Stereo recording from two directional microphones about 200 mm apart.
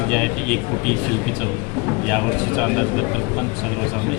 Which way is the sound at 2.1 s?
5° left (ahead or behind).